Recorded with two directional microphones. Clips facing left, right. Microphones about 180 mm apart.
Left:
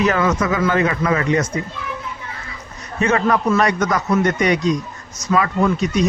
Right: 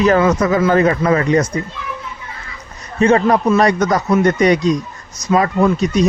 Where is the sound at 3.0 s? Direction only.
35° right (ahead or behind).